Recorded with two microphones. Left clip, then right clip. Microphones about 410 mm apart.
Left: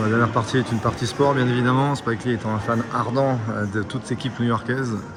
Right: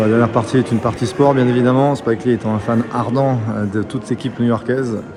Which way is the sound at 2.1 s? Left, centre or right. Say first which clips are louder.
Right 8 dB; right.